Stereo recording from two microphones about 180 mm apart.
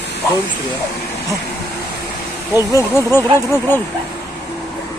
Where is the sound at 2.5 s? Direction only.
20° left (ahead or behind).